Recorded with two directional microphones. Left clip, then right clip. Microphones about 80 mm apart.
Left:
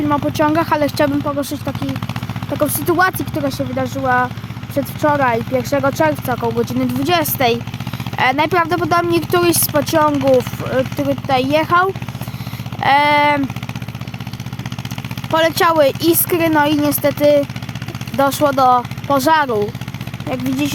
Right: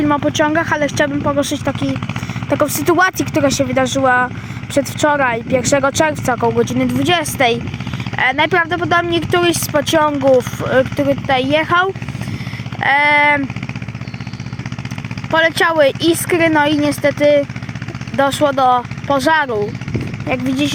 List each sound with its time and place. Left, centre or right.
0.0 s speech: centre
0.3 s speech: left
1.2 s speech: centre
2.6 s speech: centre
6.6 s speech: left
8.1 s speech: left
11.3 s speech: left
12.8 s a sound: left
15.3 s speech: left
20.2 s speech: left